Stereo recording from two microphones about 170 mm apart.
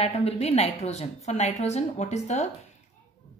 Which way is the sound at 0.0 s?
35° left (ahead or behind).